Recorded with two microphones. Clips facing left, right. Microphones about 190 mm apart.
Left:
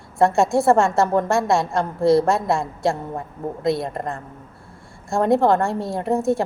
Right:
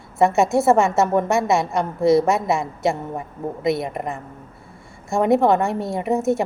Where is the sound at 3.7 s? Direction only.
15° right (ahead or behind).